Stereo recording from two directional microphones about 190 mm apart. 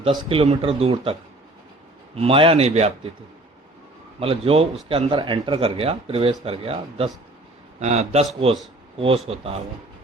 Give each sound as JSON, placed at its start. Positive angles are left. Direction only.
{"t": 0.0, "sound": "speech", "side_deg": -25}
{"t": 2.1, "sound": "speech", "side_deg": -30}
{"t": 4.2, "sound": "speech", "side_deg": -30}